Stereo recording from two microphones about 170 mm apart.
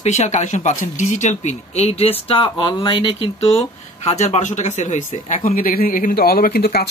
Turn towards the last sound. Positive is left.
turn(degrees=65)  # may be behind; listen again after turning